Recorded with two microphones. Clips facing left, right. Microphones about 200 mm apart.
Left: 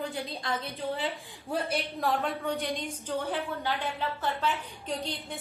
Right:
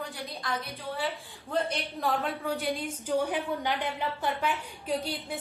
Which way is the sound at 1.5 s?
5° left (ahead or behind).